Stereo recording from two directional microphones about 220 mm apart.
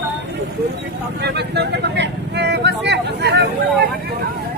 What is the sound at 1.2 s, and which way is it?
Vehicle, 50° right (ahead or behind).